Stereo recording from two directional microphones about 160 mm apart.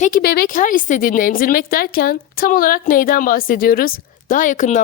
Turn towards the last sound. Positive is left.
turn(degrees=50)  # may be behind; listen again after turning